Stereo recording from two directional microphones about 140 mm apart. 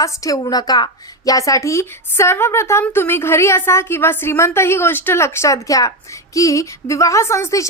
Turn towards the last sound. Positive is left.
turn(degrees=20)  # may be behind; listen again after turning